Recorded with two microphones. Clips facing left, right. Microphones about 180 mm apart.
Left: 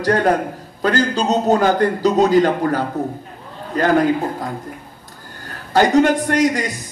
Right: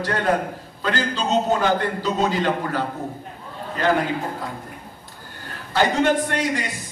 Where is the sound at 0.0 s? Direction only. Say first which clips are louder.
Left 5 dB; 40° left (ahead or behind).